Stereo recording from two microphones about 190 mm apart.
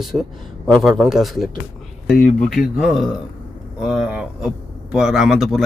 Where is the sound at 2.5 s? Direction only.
Centre (ahead or behind).